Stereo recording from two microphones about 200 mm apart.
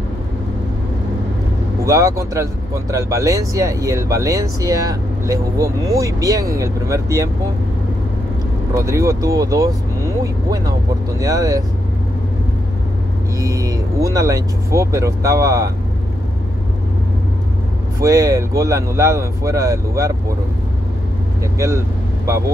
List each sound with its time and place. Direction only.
1.9 s speech: 15° right (ahead or behind)
8.7 s speech: 15° right (ahead or behind)
13.4 s speech: 15° right (ahead or behind)
18.0 s speech: 15° right (ahead or behind)
21.5 s speech: 15° right (ahead or behind)